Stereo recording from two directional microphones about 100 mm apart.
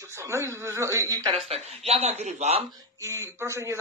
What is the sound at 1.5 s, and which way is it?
Speech, 90° right.